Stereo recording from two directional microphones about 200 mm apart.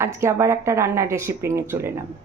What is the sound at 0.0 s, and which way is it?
Speech, 15° right (ahead or behind).